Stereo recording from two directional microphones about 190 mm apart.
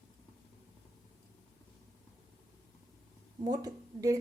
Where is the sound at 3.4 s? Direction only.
20° right (ahead or behind).